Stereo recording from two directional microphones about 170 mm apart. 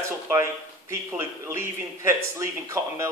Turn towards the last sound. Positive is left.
turn(degrees=-15)  # may be behind; listen again after turning